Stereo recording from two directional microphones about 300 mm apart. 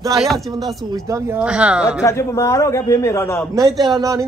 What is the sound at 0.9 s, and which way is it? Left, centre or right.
Speech, centre.